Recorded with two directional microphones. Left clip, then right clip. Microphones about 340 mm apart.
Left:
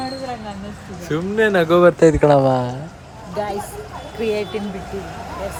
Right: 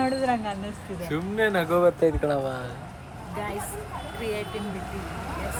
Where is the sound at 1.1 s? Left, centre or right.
Centre.